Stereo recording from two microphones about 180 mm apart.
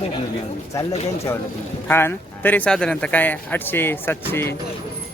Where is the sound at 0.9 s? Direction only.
35° left (ahead or behind).